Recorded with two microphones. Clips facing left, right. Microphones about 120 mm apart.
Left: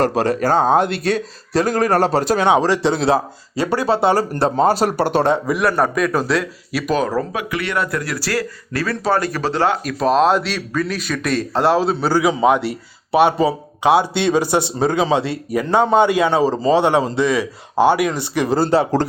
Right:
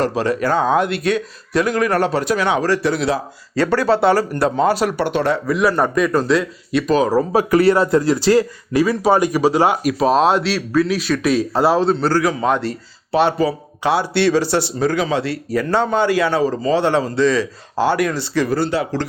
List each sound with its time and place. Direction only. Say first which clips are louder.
0.0 s speech: left 1 dB; 45° left (ahead or behind)
2.5 s speech: left 4 dB; 20° left (ahead or behind)
3.5 s speech: right 2 dB; 15° left (ahead or behind)
4.3 s speech: left 1 dB; 30° left (ahead or behind)
5.2 s speech: left 1 dB; 20° left (ahead or behind)
5.5 s a man's voice: right 1 dB; centre (ahead or behind)
7.3 s speech: right 9 dB; 35° right (ahead or behind); by 9.9 s 10° right (ahead or behind)
10.0 s speech: left 1 dB; centre (ahead or behind); by 18.6 s 20° left (ahead or behind)
18.6 s speech: left 4 dB; 35° left (ahead or behind)